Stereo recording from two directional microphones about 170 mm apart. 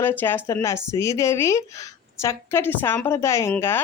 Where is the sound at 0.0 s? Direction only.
10° left (ahead or behind).